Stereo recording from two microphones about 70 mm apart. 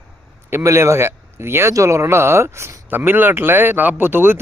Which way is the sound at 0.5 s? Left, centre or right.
Right.